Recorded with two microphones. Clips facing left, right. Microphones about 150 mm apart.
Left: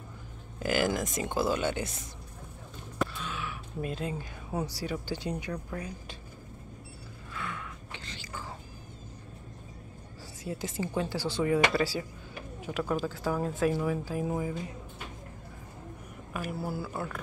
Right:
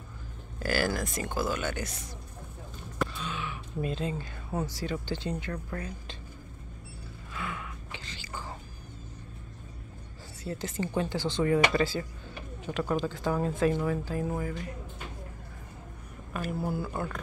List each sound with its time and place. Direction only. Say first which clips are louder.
0.6 s speech: left 1 dB; 20° left (ahead or behind)
3.0 s speech: even; centre (ahead or behind)
7.3 s gasp: right 1 dB; 5° right (ahead or behind)
10.4 s speech: right 1 dB; 10° left (ahead or behind)
16.3 s speech: right 2 dB; 5° left (ahead or behind)